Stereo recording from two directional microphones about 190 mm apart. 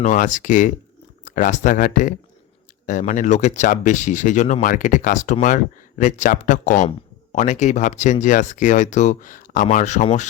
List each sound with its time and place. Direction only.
0.0 s speech: 40° left (ahead or behind)